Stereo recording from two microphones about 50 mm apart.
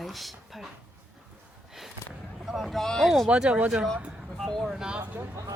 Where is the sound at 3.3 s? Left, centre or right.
Centre.